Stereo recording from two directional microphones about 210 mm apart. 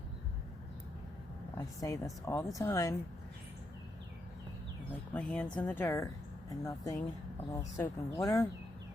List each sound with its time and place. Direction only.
1.5 s speech: 15° left (ahead or behind)
5.1 s speech: 5° left (ahead or behind)